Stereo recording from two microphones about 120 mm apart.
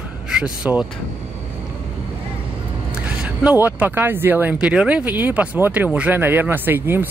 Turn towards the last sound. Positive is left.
turn(degrees=-15)  # may be behind; listen again after turning